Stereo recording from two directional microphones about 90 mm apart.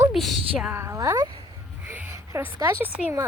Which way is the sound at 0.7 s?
30° right (ahead or behind).